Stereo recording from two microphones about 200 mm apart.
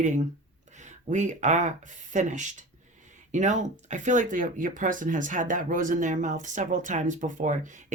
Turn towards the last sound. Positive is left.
turn(degrees=-40)  # may be behind; listen again after turning